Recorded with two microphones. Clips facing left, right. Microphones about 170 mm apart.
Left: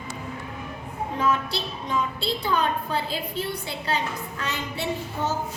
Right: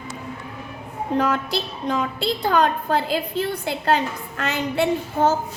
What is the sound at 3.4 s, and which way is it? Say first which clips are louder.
A woman's voice: right 7 dB; 55° right (ahead or behind).